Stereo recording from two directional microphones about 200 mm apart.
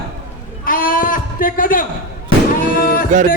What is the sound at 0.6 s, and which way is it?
A man's voice, 45° left (ahead or behind).